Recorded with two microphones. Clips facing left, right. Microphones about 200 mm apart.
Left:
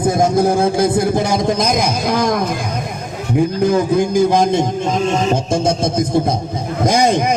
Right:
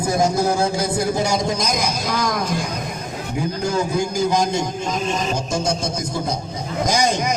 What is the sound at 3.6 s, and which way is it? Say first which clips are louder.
A man's voice: left 5 dB; 55° left (ahead or behind).